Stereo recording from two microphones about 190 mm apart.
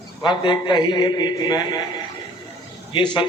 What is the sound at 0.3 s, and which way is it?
A man's voice, 25° left (ahead or behind).